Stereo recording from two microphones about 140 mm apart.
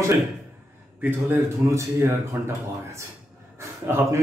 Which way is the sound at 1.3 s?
20° right (ahead or behind).